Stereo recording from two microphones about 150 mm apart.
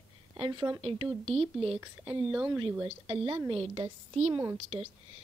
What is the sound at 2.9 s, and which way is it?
A woman's voice, 40° right (ahead or behind).